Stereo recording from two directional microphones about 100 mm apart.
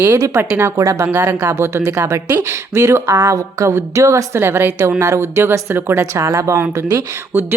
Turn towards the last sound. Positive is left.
turn(degrees=-25)  # may be behind; listen again after turning